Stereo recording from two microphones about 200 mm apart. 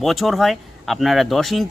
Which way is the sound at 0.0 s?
Centre (ahead or behind).